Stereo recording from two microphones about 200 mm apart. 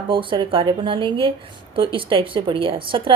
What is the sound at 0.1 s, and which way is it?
A woman's voice, 25° right (ahead or behind).